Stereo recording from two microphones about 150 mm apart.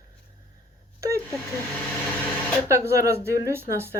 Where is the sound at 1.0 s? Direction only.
20° right (ahead or behind).